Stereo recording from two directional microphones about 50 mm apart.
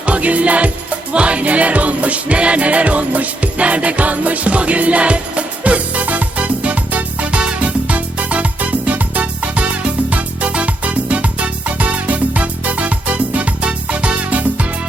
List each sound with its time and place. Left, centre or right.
0.0 s music: right